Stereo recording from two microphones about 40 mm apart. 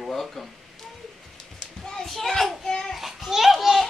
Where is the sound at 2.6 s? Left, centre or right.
Centre.